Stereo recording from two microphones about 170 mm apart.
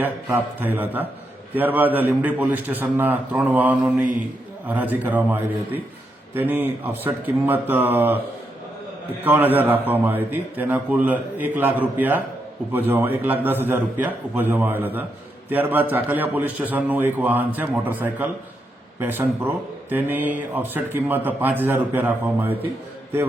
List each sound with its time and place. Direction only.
0.0 s speech: 10° right (ahead or behind)
9.2 s speech: 10° right (ahead or behind)